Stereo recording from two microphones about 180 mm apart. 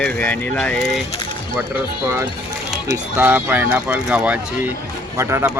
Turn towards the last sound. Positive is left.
turn(degrees=-15)  # may be behind; listen again after turning